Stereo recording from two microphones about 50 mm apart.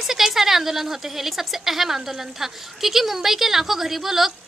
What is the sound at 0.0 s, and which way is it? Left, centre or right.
Speech, centre.